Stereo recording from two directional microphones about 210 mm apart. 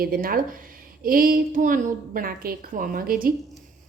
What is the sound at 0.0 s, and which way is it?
Speech, 45° right (ahead or behind).